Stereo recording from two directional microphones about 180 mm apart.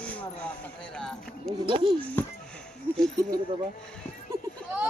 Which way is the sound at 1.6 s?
30° right (ahead or behind).